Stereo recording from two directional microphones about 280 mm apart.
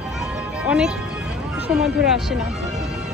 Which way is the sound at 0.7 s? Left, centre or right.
Centre.